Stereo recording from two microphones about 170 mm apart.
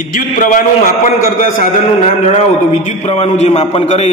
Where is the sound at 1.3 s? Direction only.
45° left (ahead or behind).